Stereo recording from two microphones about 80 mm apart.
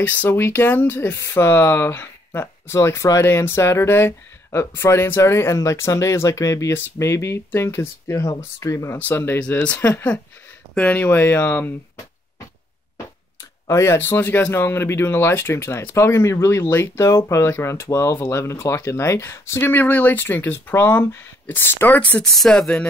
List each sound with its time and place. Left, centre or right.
0.0 s speech: left
1.1 s speech: left
9.4 s speech: centre
9.8 s speech: left
10.7 s speech: centre
11.1 s speech: left
13.7 s speech: left
22.2 s speech: centre